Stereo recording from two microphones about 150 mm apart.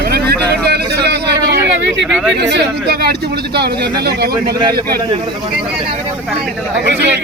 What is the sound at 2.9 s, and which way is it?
Speech, 90° right.